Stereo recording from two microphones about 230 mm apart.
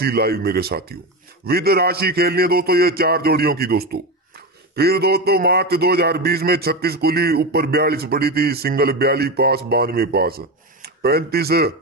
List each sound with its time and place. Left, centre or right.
0.0 s a man's voice: right